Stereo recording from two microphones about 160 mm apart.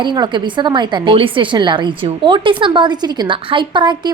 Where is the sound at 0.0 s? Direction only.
30° right (ahead or behind).